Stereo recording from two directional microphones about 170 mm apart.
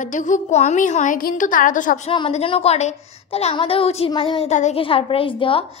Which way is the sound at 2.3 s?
35° left (ahead or behind).